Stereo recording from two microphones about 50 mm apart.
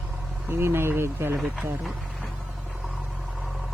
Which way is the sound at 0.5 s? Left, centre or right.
Right.